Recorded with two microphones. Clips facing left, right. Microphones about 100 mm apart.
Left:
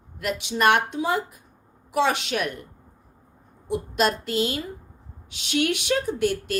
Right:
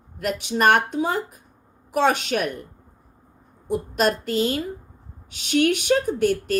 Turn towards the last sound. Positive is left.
turn(degrees=-45)  # may be behind; listen again after turning